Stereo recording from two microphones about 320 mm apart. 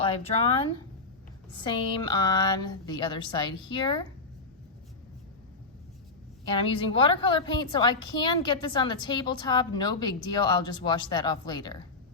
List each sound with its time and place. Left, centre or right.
0.0 s a woman's voice: centre
6.5 s a woman's voice: centre